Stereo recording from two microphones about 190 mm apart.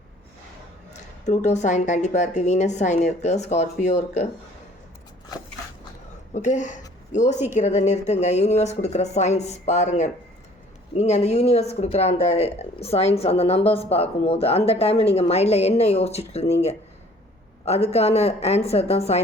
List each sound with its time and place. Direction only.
1.2 s speech: 40° left (ahead or behind)
6.3 s speech: 40° left (ahead or behind)